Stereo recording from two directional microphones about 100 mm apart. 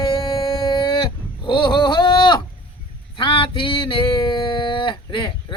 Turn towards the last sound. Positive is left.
turn(degrees=55)  # may be behind; listen again after turning